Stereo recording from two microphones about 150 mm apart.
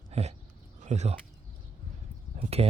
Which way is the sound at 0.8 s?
45° right (ahead or behind).